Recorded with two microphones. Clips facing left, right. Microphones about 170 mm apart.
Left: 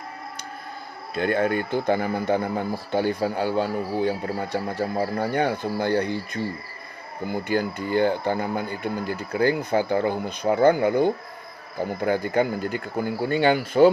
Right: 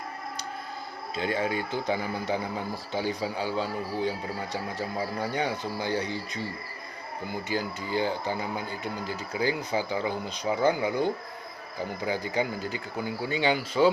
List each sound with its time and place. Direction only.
1.1 s speech: 55° left (ahead or behind)
7.4 s speech: 55° left (ahead or behind)